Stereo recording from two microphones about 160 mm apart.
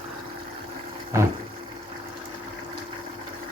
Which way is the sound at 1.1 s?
15° right (ahead or behind).